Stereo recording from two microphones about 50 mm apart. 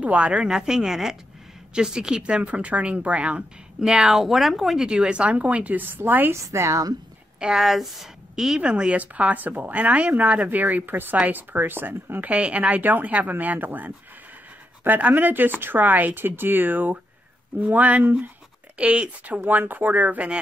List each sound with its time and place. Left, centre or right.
0.0 s speech: right
4.1 s speech: centre
4.8 s speech: centre; by 6.3 s right
6.3 s a woman's voice: right
7.3 s a woman's voice: centre
8.5 s speech: centre
9.0 s speech: right
12.2 s speech: right